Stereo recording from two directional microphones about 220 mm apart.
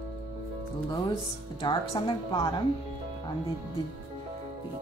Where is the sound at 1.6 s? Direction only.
15° left (ahead or behind).